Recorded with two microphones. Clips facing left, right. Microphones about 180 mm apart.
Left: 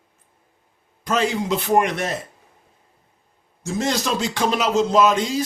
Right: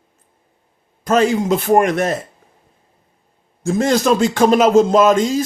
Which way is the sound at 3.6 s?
50° right (ahead or behind).